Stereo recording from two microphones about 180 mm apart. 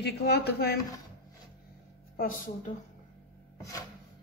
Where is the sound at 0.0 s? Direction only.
65° left (ahead or behind).